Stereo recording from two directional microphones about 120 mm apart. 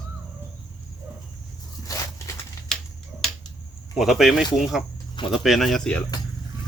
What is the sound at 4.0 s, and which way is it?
Speech, centre (ahead or behind).